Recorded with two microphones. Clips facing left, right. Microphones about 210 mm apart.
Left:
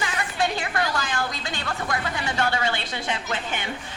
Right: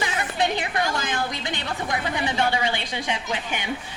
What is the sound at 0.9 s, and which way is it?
A woman's voice, 20° right (ahead or behind).